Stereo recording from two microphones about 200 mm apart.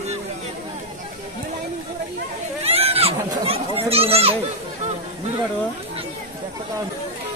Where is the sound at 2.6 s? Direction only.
30° right (ahead or behind).